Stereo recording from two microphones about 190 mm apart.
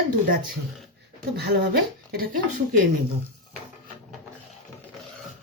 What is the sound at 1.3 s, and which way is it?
Speech, 60° right (ahead or behind).